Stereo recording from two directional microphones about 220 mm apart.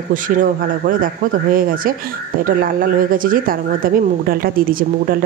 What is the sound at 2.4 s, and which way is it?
A woman's voice, 40° right (ahead or behind).